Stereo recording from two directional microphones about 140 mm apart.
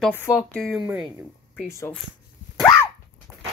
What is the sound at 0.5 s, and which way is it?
Speech, 5° left (ahead or behind).